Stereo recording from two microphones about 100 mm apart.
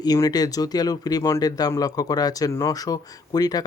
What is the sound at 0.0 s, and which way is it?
Speech, 40° left (ahead or behind).